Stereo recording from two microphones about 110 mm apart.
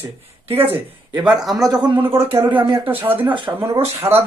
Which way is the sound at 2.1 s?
60° right (ahead or behind).